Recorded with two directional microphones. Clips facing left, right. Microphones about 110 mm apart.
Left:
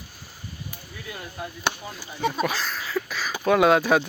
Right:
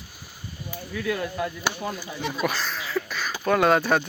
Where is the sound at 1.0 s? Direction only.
75° right (ahead or behind).